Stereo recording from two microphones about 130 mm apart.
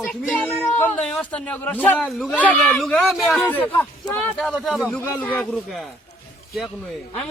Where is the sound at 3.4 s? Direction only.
15° left (ahead or behind).